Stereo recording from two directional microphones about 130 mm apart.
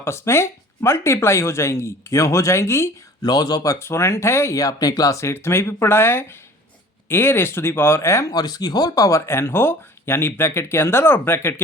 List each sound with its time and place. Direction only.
0.0 s speech: 20° left (ahead or behind)
3.2 s speech: 30° left (ahead or behind)